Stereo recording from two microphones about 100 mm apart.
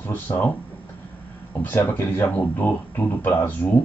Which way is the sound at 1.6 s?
20° left (ahead or behind).